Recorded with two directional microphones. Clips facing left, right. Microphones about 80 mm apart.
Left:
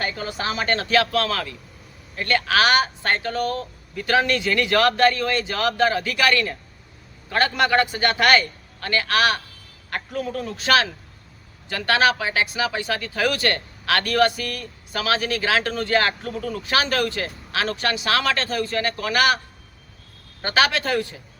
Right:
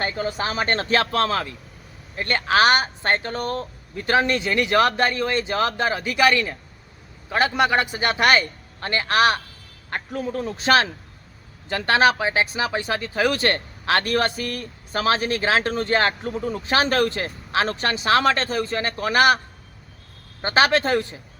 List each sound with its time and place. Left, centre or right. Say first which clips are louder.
0.0 s a woman's voice: right 2 dB; right
20.4 s speech: right 2 dB; right